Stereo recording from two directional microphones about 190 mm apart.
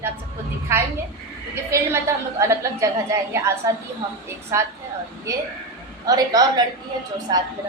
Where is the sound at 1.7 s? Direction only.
15° right (ahead or behind).